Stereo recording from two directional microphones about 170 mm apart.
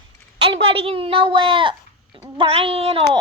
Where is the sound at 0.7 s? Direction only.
35° right (ahead or behind).